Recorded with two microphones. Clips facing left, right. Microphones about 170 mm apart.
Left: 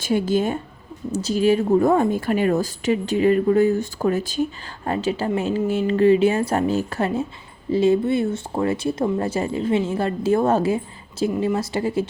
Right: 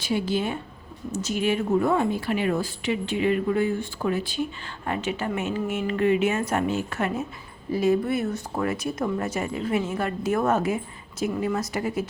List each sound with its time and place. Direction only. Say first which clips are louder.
0.0 s a woman's voice: left 5 dB; 45° left (ahead or behind); by 12.0 s 30° left (ahead or behind)